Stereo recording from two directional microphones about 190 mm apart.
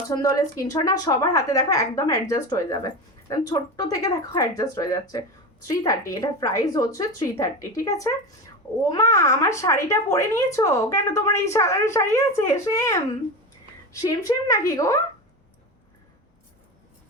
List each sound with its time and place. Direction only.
0.1 s a woman's voice: 20° left (ahead or behind)
14.0 s a woman's voice: 20° left (ahead or behind)